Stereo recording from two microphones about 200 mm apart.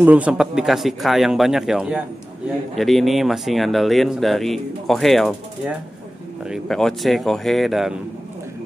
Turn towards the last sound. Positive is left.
turn(degrees=0)  # may be behind; listen again after turning